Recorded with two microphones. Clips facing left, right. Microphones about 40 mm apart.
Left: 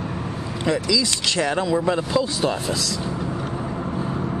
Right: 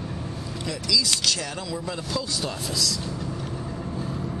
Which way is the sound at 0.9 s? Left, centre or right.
Left.